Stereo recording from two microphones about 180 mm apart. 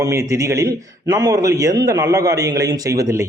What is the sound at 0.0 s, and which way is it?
A man's voice, 15° right (ahead or behind).